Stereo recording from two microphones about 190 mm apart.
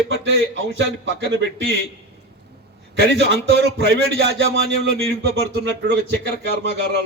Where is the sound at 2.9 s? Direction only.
60° right (ahead or behind).